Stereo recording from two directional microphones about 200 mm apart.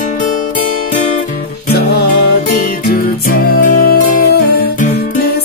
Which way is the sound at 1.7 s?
55° left (ahead or behind).